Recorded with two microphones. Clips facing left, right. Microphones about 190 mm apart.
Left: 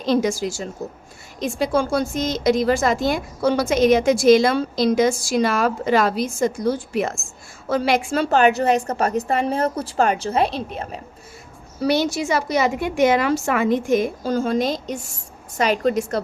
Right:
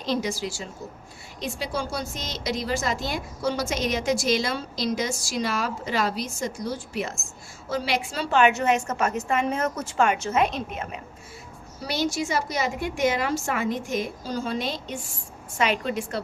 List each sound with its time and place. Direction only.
0.0 s a woman's voice: 50° left (ahead or behind); by 11.0 s 35° left (ahead or behind)
11.8 s a woman's voice: 65° left (ahead or behind); by 16.2 s 40° left (ahead or behind)